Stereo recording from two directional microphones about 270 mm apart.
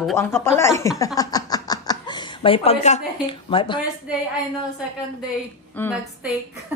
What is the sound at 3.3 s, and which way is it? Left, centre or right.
Speech, centre.